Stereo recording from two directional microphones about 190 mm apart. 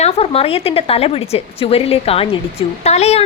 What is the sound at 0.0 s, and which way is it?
A woman's voice, 30° left (ahead or behind).